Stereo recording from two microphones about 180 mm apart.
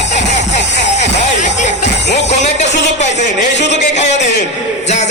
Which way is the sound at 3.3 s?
75° left (ahead or behind).